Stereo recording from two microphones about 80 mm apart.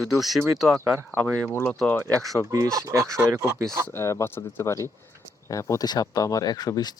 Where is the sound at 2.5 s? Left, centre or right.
Right.